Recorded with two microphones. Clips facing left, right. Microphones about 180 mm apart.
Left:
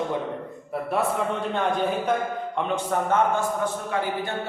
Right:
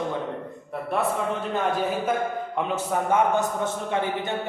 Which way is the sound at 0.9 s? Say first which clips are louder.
Even; centre (ahead or behind).